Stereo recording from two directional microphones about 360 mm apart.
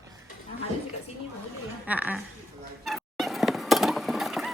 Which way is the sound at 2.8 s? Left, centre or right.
Centre.